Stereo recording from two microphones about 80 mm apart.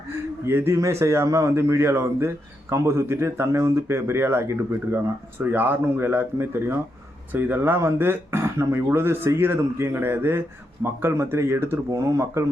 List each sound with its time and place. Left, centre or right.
0.4 s a man's voice: right
11.9 s a man's voice: right